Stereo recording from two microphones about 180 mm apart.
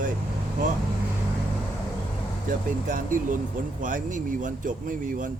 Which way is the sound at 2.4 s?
45° right (ahead or behind).